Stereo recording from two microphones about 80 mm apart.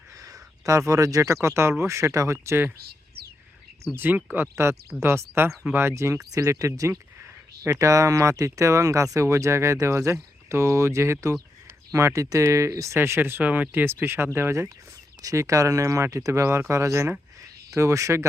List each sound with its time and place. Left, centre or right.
0.2 s speech: right
3.9 s speech: right
4.5 s speech: right
15.2 s speech: right